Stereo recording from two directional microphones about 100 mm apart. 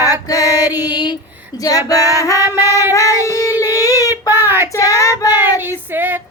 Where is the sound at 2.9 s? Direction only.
30° left (ahead or behind).